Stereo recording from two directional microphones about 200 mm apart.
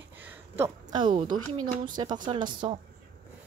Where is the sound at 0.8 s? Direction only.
25° right (ahead or behind).